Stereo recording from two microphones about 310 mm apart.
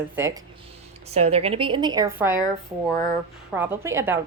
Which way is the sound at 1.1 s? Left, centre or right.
Centre.